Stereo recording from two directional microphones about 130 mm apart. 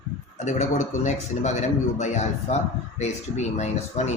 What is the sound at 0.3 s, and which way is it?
A man's voice, 65° left (ahead or behind).